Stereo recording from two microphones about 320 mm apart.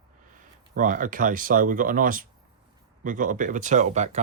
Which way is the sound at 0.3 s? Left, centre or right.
Right.